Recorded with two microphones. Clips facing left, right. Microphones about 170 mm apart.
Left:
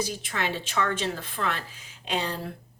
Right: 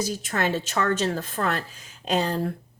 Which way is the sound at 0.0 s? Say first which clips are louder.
Right 4 dB; 45° right (ahead or behind).